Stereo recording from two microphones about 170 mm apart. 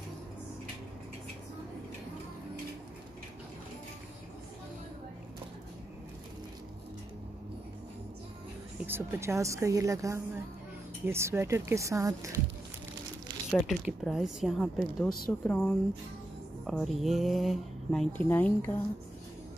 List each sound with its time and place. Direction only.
8.8 s a woman's voice: 15° right (ahead or behind)
13.5 s speech: centre (ahead or behind)